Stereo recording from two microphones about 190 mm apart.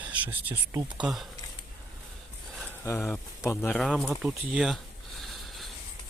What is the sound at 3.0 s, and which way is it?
Speech, 5° left (ahead or behind).